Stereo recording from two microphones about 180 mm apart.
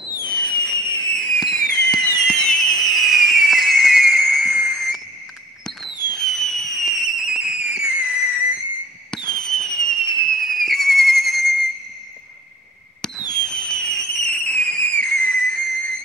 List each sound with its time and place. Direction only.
0.5 s fireworks: 5° left (ahead or behind)
2.2 s a sound: 5° left (ahead or behind)
5.9 s fireworks: 25° left (ahead or behind)
6.1 s fireworks: centre (ahead or behind)
9.3 s fireworks: 5° left (ahead or behind)
13.3 s fireworks: 5° left (ahead or behind)